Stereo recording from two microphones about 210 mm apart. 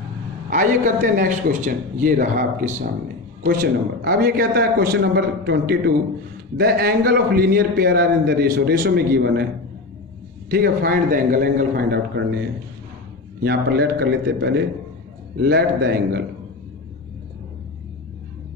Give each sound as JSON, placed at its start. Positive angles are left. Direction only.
{"t": 0.5, "sound": "a man's voice", "side_deg": -40}
{"t": 10.5, "sound": "a man's voice", "side_deg": -45}
{"t": 13.4, "sound": "a man's voice", "side_deg": -50}